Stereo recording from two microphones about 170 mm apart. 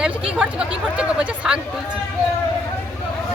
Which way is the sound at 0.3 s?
5° right (ahead or behind).